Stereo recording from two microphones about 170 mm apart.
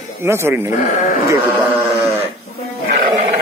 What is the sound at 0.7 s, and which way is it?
Speech, 50° left (ahead or behind).